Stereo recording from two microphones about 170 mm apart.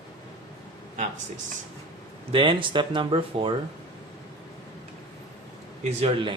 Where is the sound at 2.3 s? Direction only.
30° right (ahead or behind).